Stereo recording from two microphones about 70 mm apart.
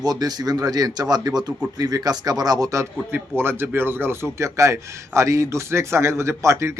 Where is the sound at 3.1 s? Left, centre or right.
Right.